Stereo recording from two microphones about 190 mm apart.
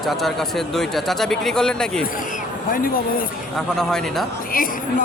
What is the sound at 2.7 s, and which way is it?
Speech, 50° left (ahead or behind).